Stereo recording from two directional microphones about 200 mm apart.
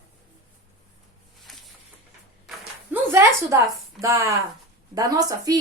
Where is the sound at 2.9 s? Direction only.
15° right (ahead or behind).